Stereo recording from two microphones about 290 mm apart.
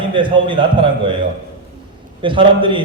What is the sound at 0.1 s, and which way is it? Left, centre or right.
Speech, centre.